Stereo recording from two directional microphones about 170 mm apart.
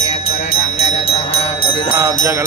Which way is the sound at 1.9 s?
15° right (ahead or behind).